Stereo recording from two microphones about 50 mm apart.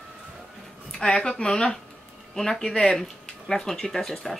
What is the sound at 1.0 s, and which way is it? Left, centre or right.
Speech, centre.